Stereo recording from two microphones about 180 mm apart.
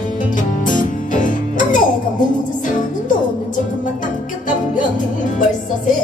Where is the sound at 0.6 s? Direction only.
45° left (ahead or behind).